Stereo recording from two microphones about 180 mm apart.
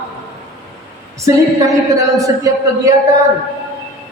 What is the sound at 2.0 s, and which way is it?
Speech, 20° right (ahead or behind).